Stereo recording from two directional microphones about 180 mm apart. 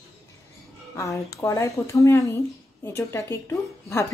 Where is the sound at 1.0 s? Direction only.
15° left (ahead or behind).